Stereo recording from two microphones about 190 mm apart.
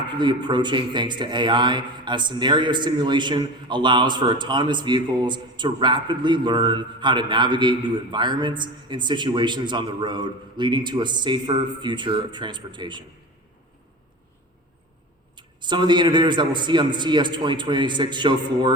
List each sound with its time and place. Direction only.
0.2 s a man's voice: 25° right (ahead or behind)
15.4 s a man's voice: 25° right (ahead or behind)